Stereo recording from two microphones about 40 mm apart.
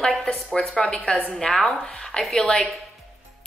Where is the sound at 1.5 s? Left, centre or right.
Centre.